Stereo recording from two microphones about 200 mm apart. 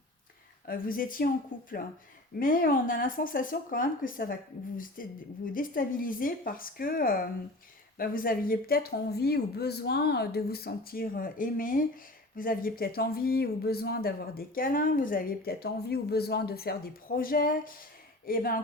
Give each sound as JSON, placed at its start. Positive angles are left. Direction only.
{"t": 0.7, "sound": "speech", "side_deg": 45}